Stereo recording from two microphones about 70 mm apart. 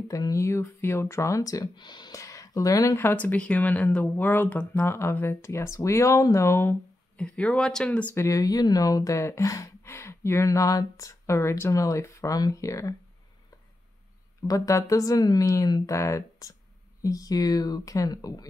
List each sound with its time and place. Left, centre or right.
0.3 s speech: left
1.8 s speech: left
2.1 s speech: left
3.0 s speech: left
4.0 s speech: left
4.8 s speech: left
7.2 s speech: centre
8.1 s speech: left
9.8 s speech: left
11.7 s speech: left
14.5 s speech: left